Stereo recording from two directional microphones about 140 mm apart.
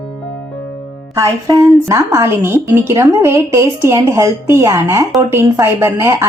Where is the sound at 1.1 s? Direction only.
25° right (ahead or behind).